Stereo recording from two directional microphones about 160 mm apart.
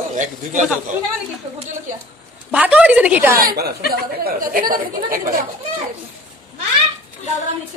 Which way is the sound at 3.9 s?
65° right (ahead or behind).